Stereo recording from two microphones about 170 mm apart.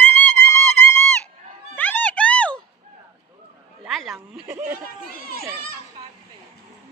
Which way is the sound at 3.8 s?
Centre (ahead or behind).